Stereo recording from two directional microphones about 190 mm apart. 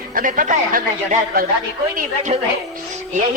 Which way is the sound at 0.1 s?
45° right (ahead or behind).